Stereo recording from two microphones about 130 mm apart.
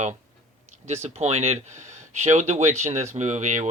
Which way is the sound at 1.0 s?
60° right (ahead or behind).